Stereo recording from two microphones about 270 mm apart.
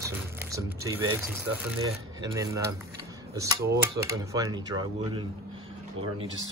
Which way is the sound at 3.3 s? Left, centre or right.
Centre.